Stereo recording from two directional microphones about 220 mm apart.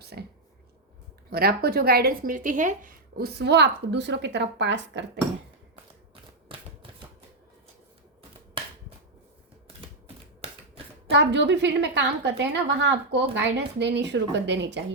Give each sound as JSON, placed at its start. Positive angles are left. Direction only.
{"t": 0.0, "sound": "a sound", "side_deg": -45}
{"t": 1.3, "sound": "a woman's voice", "side_deg": -45}
{"t": 8.6, "sound": "finger snapping", "side_deg": -25}
{"t": 11.1, "sound": "a woman's voice", "side_deg": -50}